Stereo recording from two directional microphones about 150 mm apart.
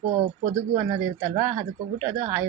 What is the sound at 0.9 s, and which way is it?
Speech, 35° right (ahead or behind).